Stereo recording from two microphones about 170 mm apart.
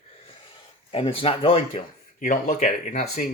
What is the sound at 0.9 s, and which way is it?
Speech, 35° left (ahead or behind).